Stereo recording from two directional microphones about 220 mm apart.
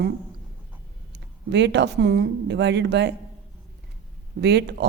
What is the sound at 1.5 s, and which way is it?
Speech, 50° right (ahead or behind).